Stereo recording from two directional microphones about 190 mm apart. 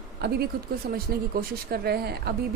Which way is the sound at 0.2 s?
55° right (ahead or behind).